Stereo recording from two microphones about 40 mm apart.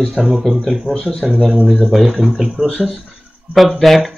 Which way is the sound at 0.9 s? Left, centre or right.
Right.